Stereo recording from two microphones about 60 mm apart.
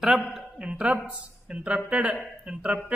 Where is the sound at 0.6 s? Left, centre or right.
Centre.